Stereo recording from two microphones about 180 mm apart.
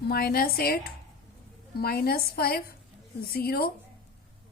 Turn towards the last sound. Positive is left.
turn(degrees=55)  # may be behind; listen again after turning